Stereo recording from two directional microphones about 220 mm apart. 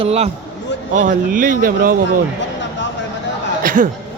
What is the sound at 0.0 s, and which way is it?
Speech, 30° right (ahead or behind).